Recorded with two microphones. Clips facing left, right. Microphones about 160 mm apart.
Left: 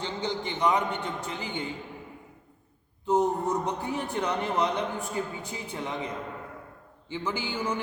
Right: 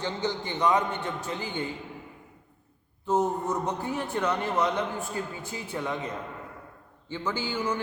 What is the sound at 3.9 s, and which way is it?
Speech, 15° left (ahead or behind).